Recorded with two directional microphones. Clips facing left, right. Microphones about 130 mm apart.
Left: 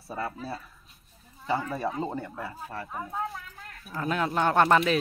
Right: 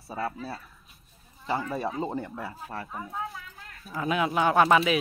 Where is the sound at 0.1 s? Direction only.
5° right (ahead or behind).